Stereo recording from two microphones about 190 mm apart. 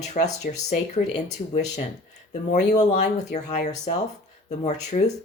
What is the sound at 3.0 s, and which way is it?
Speech, 40° left (ahead or behind).